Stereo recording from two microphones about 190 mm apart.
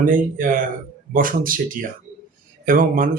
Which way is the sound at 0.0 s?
45° right (ahead or behind).